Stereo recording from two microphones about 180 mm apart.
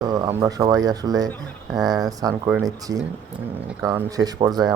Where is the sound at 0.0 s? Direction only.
20° right (ahead or behind).